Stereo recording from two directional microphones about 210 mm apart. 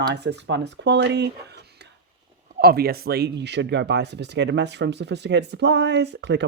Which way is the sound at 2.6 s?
50° right (ahead or behind).